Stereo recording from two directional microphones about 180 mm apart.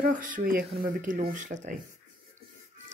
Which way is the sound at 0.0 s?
50° right (ahead or behind).